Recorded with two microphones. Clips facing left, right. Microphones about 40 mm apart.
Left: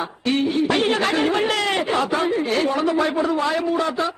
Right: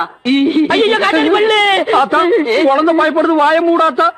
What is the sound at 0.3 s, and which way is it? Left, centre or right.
A woman's voice, right.